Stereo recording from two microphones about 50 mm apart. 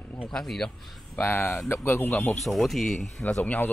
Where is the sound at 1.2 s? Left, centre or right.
Left.